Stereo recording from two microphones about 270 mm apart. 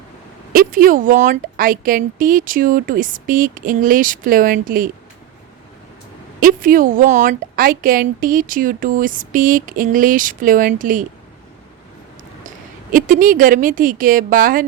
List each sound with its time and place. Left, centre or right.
0.5 s speech: right
6.4 s speech: right
12.9 s speech: right